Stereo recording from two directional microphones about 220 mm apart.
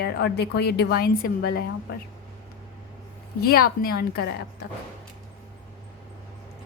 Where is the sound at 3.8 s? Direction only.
45° left (ahead or behind).